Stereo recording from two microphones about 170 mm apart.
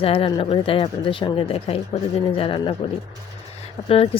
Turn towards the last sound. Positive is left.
turn(degrees=35)  # may be behind; listen again after turning